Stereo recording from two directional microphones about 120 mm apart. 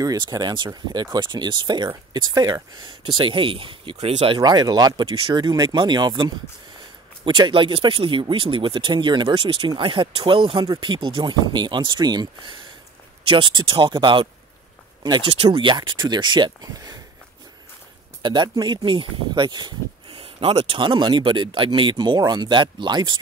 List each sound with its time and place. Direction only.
0.0 s speech: 30° right (ahead or behind)
4.4 s speech: 35° right (ahead or behind)
18.2 s speech: 40° right (ahead or behind)